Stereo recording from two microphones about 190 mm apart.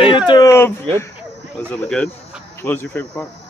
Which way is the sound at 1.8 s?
5° left (ahead or behind).